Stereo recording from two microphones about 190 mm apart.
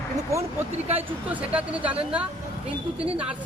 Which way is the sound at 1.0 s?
10° right (ahead or behind).